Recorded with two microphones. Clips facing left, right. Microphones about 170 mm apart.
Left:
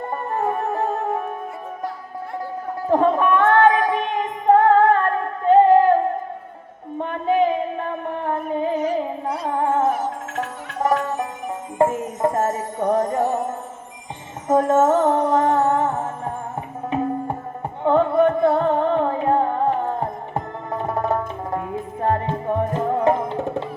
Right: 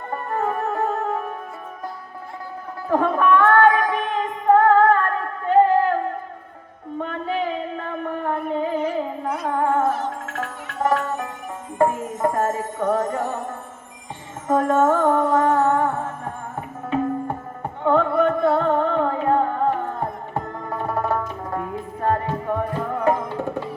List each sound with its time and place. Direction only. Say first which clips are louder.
0.3 s music: even; 20° left (ahead or behind)
2.9 s female singing: left 1 dB; 20° left (ahead or behind)
7.0 s a sound: left 6 dB; 20° left (ahead or behind)
8.9 s music: left 1 dB; 30° left (ahead or behind)
9.5 s music: left 1 dB; 20° left (ahead or behind)
14.4 s music: left 2 dB; 20° left (ahead or behind)
17.8 s music: left 2 dB; 20° left (ahead or behind)